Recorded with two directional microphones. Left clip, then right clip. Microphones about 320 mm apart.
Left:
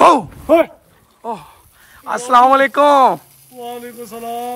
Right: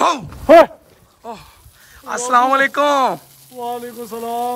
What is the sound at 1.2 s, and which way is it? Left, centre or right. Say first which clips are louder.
Speech: left 7 dB; centre.